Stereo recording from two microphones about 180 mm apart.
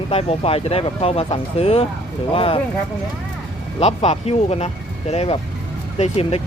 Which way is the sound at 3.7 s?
35° left (ahead or behind).